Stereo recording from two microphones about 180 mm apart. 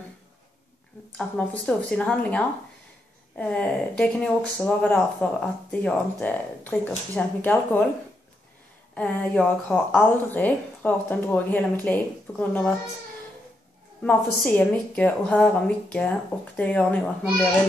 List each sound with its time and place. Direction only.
1.1 s speech: 5° left (ahead or behind)
8.9 s speech: 5° left (ahead or behind)
14.0 s speech: 5° left (ahead or behind)